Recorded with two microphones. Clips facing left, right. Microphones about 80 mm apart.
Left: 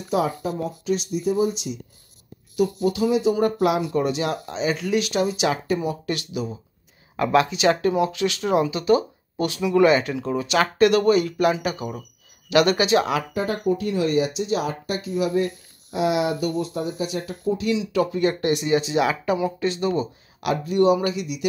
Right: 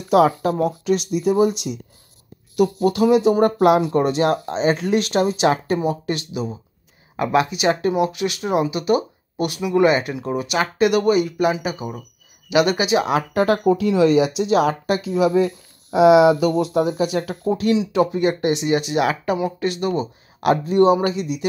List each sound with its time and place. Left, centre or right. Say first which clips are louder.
0.1 s speech: right 8 dB; right
5.8 s speech: right 4 dB; right
13.3 s speech: right 6 dB; right
16.3 s speech: right 7 dB; right
17.7 s speech: right 4 dB; right
18.8 s speech: right 1 dB; right
20.3 s speech: right 5 dB; right